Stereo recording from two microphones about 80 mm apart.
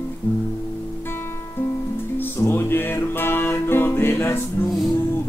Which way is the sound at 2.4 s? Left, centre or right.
Left.